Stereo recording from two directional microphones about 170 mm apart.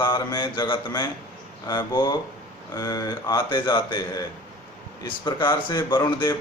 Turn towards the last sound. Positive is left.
turn(degrees=25)  # may be behind; listen again after turning